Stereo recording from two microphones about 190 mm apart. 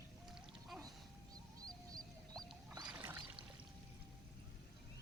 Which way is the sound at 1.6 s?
20° right (ahead or behind).